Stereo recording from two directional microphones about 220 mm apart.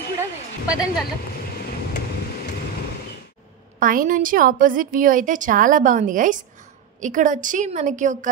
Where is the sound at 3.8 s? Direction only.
40° right (ahead or behind).